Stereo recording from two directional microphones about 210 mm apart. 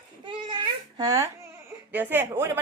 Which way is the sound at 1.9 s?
10° right (ahead or behind).